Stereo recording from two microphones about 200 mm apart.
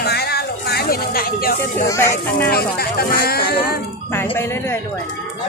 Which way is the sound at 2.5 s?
50° left (ahead or behind).